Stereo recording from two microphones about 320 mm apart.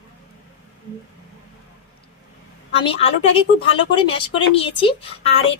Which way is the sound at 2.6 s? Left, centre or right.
Centre.